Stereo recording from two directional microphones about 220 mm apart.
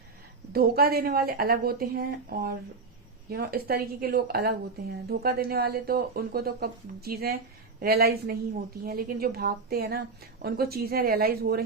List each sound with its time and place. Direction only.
0.5 s speech: 45° right (ahead or behind)